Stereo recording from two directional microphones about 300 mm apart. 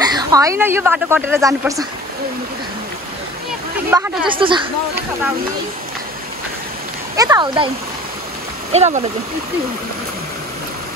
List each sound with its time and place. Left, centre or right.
0.0 s speech: centre
3.9 s speech: centre
7.2 s speech: centre
8.7 s speech: right